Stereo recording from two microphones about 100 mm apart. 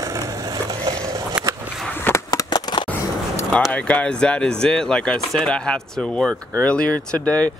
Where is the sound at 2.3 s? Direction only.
45° left (ahead or behind).